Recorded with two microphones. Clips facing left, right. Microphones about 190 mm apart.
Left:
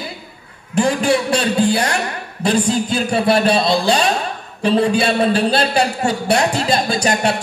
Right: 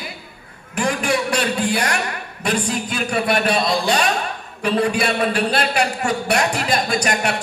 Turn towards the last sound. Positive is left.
turn(degrees=30)  # may be behind; listen again after turning